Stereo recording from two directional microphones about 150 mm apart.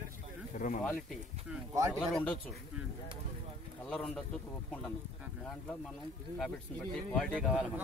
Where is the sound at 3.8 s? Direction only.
5° left (ahead or behind).